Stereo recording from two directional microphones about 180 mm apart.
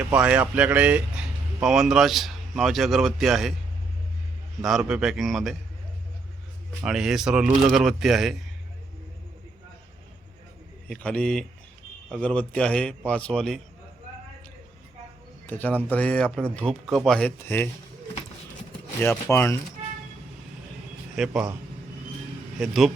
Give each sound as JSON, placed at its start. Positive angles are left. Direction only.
{"t": 0.0, "sound": "speech", "side_deg": -10}
{"t": 4.6, "sound": "speech", "side_deg": 0}
{"t": 6.8, "sound": "speech", "side_deg": -5}
{"t": 10.8, "sound": "speech", "side_deg": 5}
{"t": 15.4, "sound": "a man's voice", "side_deg": 10}
{"t": 19.3, "sound": "speech", "side_deg": 15}
{"t": 21.2, "sound": "speech", "side_deg": 0}
{"t": 22.6, "sound": "speech", "side_deg": 0}